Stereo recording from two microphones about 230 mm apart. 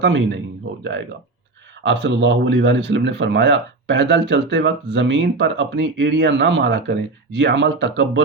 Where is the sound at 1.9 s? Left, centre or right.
Right.